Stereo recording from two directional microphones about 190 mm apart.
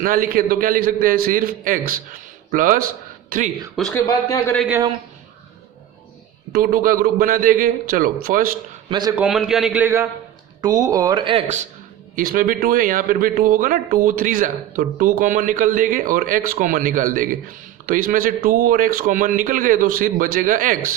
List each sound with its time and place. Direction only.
0.0 s a man's voice: 45° right (ahead or behind)
3.9 s a man's voice: 15° left (ahead or behind)
6.5 s a man's voice: 50° right (ahead or behind)
8.9 s speech: 20° right (ahead or behind)
9.1 s a man's voice: 5° right (ahead or behind); by 20.9 s 45° right (ahead or behind)